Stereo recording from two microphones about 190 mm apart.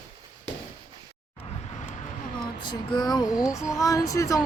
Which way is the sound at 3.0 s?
20° left (ahead or behind).